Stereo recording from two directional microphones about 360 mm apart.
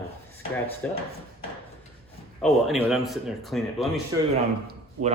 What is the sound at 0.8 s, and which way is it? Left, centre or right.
Speech, centre.